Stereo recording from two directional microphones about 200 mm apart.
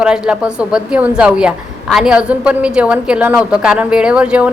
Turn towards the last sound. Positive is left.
turn(degrees=-5)  # may be behind; listen again after turning